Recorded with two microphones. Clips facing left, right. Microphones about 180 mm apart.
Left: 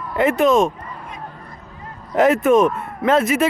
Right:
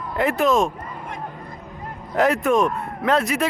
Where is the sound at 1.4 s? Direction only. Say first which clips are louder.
Right 3 dB; 15° right (ahead or behind).